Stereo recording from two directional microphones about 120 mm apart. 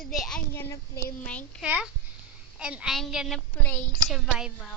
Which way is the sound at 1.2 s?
10° left (ahead or behind).